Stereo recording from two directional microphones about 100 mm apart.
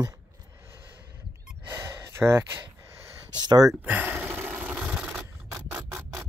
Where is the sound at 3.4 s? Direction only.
45° right (ahead or behind).